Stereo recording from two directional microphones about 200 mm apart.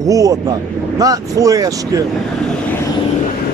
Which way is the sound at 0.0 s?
15° right (ahead or behind).